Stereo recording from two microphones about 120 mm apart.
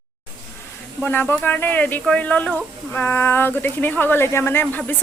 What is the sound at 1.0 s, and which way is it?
Speech, 15° left (ahead or behind).